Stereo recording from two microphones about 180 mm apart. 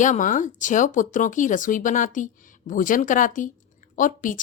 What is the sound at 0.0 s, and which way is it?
A woman's voice, 45° left (ahead or behind).